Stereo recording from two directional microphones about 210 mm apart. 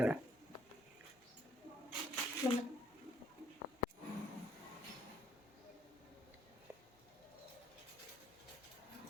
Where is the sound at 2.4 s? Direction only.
15° left (ahead or behind).